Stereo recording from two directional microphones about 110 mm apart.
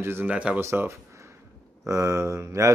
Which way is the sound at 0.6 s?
25° right (ahead or behind).